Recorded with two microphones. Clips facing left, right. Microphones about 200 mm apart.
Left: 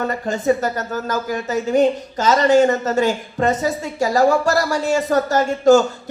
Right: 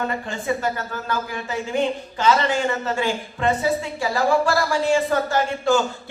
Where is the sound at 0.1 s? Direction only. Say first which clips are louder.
Left 7 dB; 40° left (ahead or behind).